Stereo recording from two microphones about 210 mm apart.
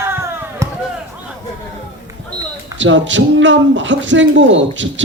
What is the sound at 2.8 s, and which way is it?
Speech, 60° right (ahead or behind).